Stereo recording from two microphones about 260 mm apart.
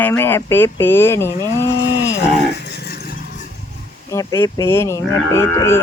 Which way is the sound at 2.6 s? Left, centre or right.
Left.